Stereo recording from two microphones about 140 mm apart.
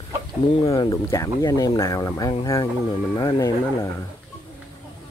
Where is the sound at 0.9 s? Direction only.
20° left (ahead or behind).